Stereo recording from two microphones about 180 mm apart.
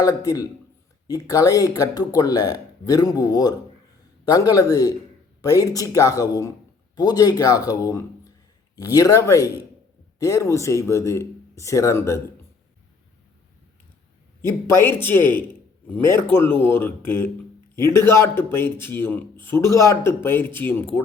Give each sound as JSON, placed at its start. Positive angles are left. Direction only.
{"t": 0.0, "sound": "speech", "side_deg": 20}
{"t": 14.4, "sound": "speech", "side_deg": 15}